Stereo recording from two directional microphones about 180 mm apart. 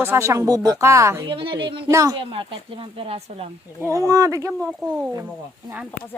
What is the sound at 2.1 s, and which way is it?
Speech, 30° right (ahead or behind).